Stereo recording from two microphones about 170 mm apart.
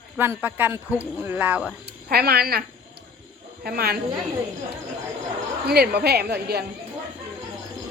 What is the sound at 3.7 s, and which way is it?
Speech, 65° right (ahead or behind).